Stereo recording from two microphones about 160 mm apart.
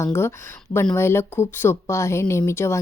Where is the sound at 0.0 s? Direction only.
15° left (ahead or behind).